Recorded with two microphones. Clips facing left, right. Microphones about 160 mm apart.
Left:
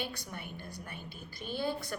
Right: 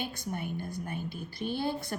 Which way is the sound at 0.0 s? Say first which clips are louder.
Right 5 dB; 45° right (ahead or behind).